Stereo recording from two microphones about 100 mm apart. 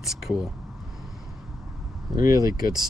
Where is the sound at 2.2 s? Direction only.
40° right (ahead or behind).